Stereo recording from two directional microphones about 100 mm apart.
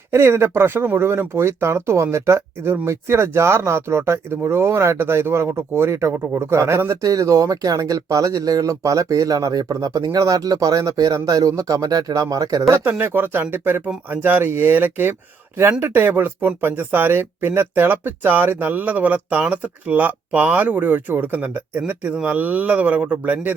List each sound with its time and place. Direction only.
0.1 s speech: 25° right (ahead or behind)
12.8 s speech: 20° right (ahead or behind)